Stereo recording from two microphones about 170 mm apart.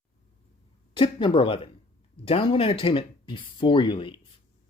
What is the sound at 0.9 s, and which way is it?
Speech, 30° left (ahead or behind).